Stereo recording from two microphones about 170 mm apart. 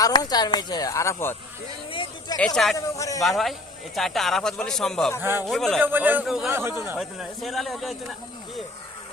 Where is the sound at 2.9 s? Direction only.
20° left (ahead or behind).